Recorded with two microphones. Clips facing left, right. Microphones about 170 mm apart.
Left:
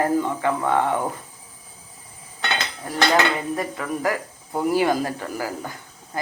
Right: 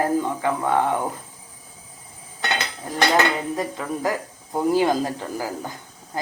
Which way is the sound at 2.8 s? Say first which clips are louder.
Even; 15° right (ahead or behind).